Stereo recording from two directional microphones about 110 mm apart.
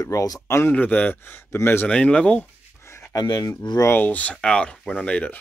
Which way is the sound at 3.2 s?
35° left (ahead or behind).